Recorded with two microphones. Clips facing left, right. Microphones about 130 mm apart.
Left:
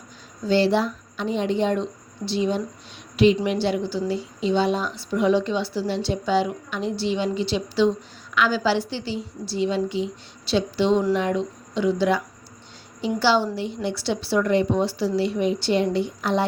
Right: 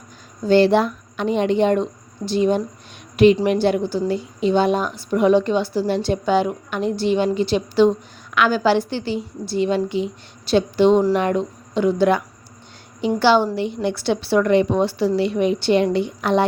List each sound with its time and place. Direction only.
0.4 s a woman's voice: 55° right (ahead or behind)